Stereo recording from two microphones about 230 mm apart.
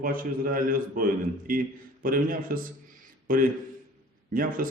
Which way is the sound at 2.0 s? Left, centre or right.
Right.